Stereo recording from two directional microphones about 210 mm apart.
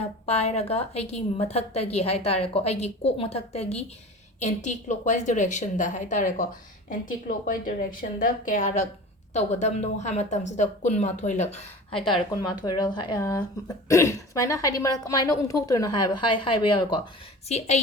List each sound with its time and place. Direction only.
0.0 s a woman's voice: 30° left (ahead or behind)